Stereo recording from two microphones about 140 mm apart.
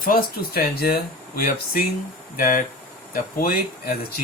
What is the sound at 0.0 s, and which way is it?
Speech, 90° left.